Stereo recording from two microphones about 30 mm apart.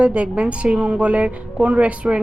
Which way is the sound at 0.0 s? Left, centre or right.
Right.